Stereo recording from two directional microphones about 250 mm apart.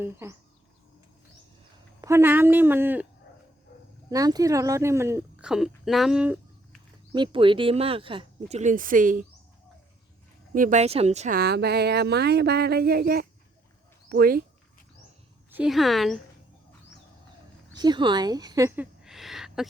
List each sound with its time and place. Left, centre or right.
0.0 s speech: centre
2.0 s speech: centre
4.1 s speech: centre
7.1 s speech: centre
10.5 s speech: right
15.5 s speech: centre
17.7 s speech: centre
19.0 s a sound: centre